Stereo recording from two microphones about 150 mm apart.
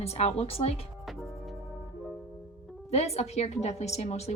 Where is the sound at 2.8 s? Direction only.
45° left (ahead or behind).